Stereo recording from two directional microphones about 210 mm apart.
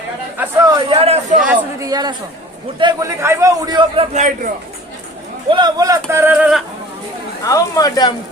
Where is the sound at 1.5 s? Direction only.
15° right (ahead or behind).